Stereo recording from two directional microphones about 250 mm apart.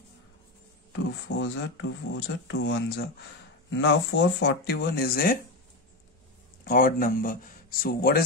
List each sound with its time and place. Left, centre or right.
0.9 s speech: left
6.6 s speech: left